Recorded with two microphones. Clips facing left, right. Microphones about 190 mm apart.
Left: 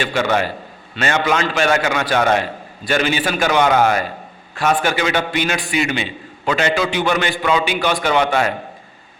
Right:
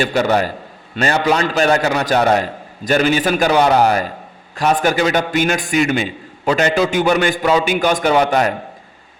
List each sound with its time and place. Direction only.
0.0 s a man's voice: 40° right (ahead or behind)